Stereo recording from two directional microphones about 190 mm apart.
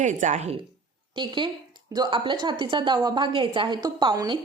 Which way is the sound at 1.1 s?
25° right (ahead or behind).